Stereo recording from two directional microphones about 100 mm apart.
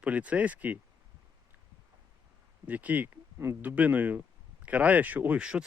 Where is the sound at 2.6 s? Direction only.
15° right (ahead or behind).